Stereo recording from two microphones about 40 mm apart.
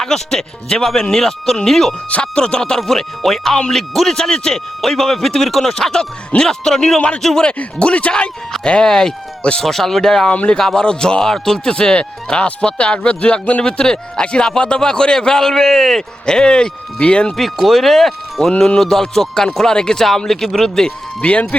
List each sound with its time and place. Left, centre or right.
0.0 s speech: centre
2.2 s speech: left
7.4 s speech: left
10.2 s speech: left
10.6 s speech: centre
11.7 s speech: left
13.7 s speech: centre
16.2 s speech: centre
17.3 s speech: centre
21.2 s speech: left